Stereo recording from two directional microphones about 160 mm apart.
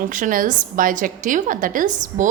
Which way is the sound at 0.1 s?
55° right (ahead or behind).